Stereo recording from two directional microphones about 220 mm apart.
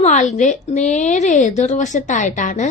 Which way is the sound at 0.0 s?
30° left (ahead or behind).